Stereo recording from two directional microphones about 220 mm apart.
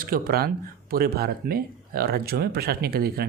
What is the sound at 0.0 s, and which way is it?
Speech, 40° right (ahead or behind).